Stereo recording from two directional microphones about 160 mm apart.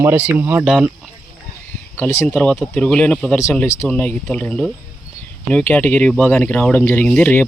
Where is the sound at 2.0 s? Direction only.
15° left (ahead or behind).